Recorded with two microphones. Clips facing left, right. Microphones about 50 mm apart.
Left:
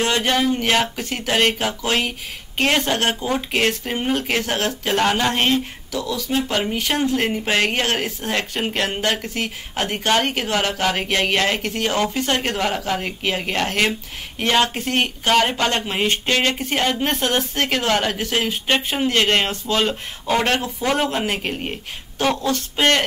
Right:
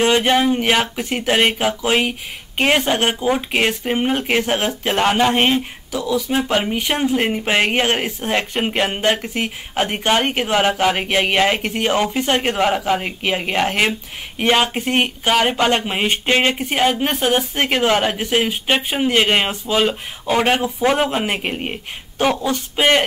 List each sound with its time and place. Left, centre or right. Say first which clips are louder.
0.0 s speech: right 4 dB; centre